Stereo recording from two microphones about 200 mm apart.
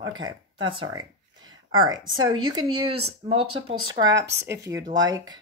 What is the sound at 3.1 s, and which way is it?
Speech, 30° right (ahead or behind).